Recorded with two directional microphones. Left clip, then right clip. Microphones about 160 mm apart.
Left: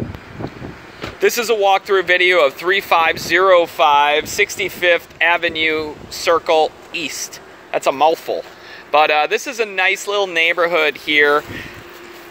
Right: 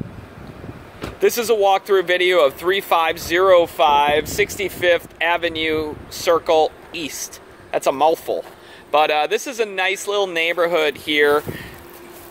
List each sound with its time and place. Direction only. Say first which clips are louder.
1.2 s speech: left 1 dB; 15° right (ahead or behind)